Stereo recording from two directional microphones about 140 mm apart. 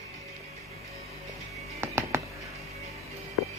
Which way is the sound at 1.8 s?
20° right (ahead or behind).